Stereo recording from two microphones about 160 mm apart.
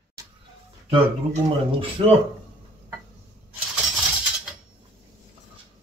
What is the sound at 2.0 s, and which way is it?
Speech, 30° right (ahead or behind).